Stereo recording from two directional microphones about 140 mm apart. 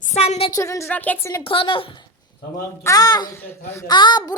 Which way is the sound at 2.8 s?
25° left (ahead or behind).